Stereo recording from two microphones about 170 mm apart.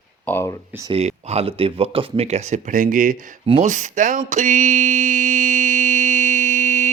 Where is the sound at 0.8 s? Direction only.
40° right (ahead or behind).